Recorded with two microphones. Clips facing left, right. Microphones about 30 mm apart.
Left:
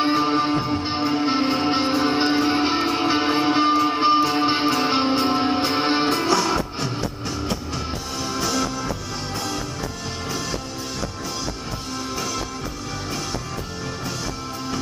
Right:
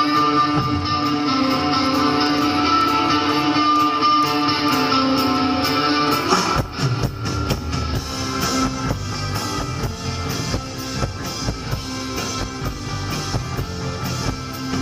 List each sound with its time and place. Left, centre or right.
0.0 s music: centre